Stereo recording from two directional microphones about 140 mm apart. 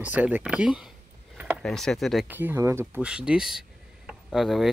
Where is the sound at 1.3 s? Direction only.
10° right (ahead or behind).